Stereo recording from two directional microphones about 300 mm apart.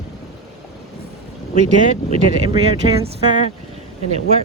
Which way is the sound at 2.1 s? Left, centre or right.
Centre.